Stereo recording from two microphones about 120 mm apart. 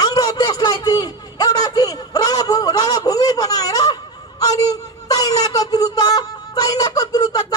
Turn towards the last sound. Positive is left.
turn(degrees=30)  # may be behind; listen again after turning